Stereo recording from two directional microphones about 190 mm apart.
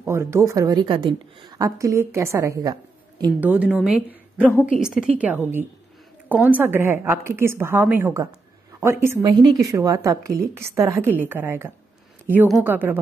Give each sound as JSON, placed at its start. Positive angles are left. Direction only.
{"t": 0.0, "sound": "a woman's voice", "side_deg": -15}
{"t": 3.3, "sound": "a woman's voice", "side_deg": -10}